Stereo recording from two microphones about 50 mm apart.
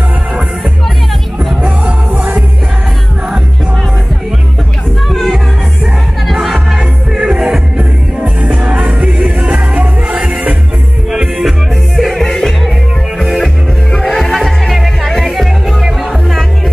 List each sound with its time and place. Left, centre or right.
1.6 s music: right
5.0 s music: centre
8.5 s music: right
11.1 s music: centre
12.0 s music: centre